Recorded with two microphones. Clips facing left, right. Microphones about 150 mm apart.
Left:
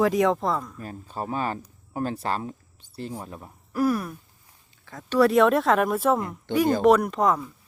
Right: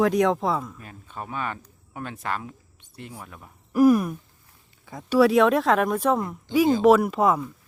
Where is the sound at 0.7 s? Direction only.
35° left (ahead or behind).